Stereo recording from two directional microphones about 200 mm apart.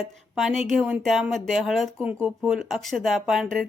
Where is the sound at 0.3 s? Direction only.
Centre (ahead or behind).